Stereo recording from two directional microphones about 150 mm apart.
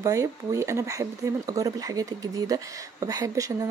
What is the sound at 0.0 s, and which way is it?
Speech, 20° right (ahead or behind).